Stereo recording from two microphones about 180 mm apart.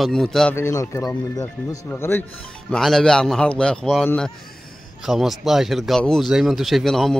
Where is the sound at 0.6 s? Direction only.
15° left (ahead or behind).